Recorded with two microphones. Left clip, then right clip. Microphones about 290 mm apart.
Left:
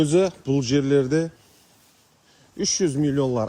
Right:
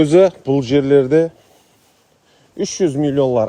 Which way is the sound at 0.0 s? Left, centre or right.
Right.